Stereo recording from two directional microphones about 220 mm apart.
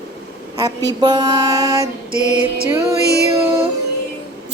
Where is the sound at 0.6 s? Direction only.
15° right (ahead or behind).